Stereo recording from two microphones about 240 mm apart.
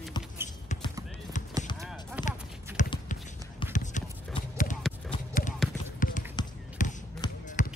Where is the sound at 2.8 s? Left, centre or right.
Left.